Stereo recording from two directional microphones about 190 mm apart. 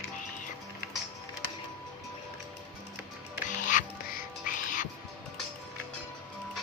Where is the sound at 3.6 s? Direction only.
45° left (ahead or behind).